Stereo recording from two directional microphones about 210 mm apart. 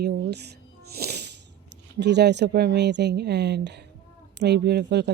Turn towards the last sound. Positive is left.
turn(degrees=-55)  # may be behind; listen again after turning